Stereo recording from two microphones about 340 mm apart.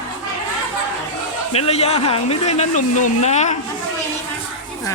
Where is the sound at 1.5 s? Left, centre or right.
Centre.